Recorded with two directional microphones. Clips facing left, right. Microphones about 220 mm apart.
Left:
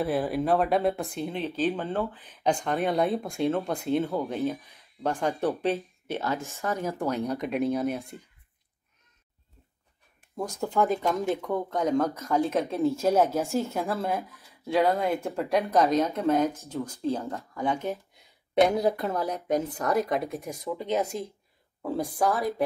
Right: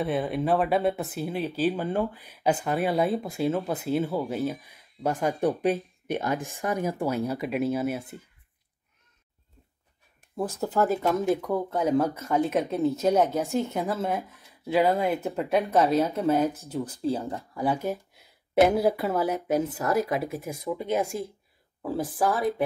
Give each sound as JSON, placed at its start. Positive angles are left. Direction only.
{"t": 0.0, "sound": "speech", "side_deg": 0}
{"t": 10.6, "sound": "speech", "side_deg": -5}